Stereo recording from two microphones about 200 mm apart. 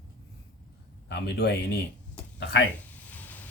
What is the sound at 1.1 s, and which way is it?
Speech, 55° left (ahead or behind).